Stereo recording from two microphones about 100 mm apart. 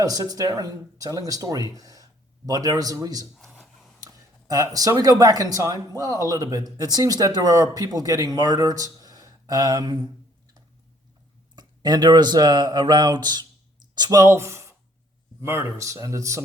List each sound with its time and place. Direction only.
0.0 s speech: 40° right (ahead or behind)
3.3 s a sound: centre (ahead or behind)
4.0 s speech: 35° right (ahead or behind)
11.5 s speech: 45° right (ahead or behind)
14.2 s a man's voice: 30° right (ahead or behind)